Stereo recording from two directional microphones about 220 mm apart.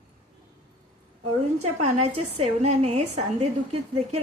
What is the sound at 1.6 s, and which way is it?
A woman's voice, 30° right (ahead or behind).